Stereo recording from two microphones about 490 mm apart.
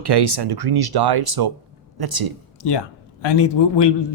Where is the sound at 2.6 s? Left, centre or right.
Left.